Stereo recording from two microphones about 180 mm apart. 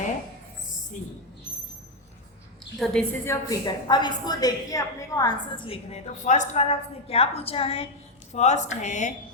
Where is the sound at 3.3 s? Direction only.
20° left (ahead or behind); by 9.1 s 40° left (ahead or behind).